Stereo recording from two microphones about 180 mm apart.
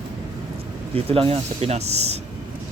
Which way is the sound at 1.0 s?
30° right (ahead or behind).